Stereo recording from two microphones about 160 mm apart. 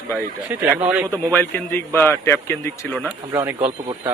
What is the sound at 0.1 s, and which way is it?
Speech, 15° right (ahead or behind).